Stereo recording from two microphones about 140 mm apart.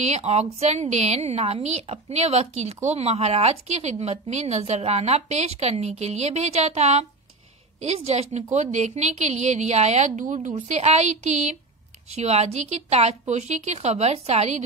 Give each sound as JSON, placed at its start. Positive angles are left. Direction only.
{"t": 0.0, "sound": "a woman's voice", "side_deg": -50}